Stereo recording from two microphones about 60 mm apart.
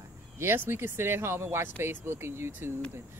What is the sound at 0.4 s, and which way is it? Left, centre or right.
Speech, right.